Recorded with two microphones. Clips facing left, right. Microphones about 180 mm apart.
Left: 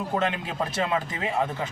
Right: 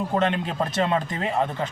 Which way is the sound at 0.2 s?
5° left (ahead or behind).